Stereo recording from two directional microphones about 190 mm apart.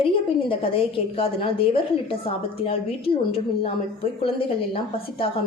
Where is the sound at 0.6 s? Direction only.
30° left (ahead or behind).